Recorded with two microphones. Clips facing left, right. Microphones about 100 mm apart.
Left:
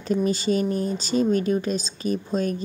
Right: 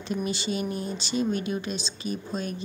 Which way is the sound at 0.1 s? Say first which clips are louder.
Left 7 dB; 40° left (ahead or behind).